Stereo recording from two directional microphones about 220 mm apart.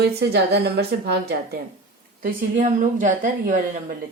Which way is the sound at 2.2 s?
35° right (ahead or behind).